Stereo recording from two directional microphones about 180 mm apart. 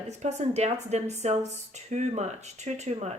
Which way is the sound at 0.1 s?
40° right (ahead or behind).